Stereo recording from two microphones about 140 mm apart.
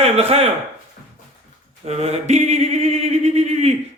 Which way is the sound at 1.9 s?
50° right (ahead or behind).